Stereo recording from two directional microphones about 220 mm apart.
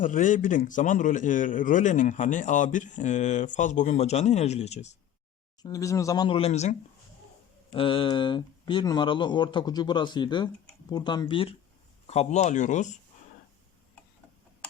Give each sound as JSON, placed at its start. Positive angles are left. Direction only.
{"t": 0.0, "sound": "a man's voice", "side_deg": 35}
{"t": 5.6, "sound": "a man's voice", "side_deg": 15}